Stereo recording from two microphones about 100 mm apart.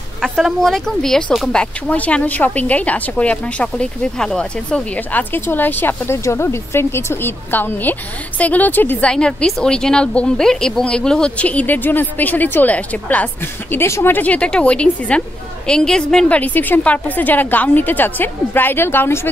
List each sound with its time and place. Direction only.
0.2 s a woman's voice: centre (ahead or behind); by 19.2 s 25° left (ahead or behind)